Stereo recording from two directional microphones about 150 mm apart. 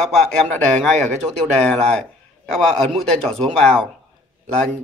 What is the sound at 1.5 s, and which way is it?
A man's voice, 5° left (ahead or behind).